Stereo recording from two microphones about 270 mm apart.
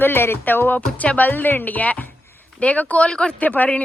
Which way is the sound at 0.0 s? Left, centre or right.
Centre.